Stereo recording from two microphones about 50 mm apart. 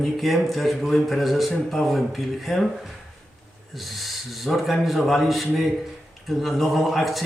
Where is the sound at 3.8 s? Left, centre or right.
Centre.